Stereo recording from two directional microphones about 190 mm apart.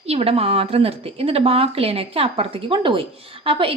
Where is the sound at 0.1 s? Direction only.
30° right (ahead or behind).